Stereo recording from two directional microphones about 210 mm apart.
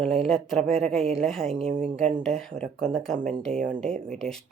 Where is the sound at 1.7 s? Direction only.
40° right (ahead or behind).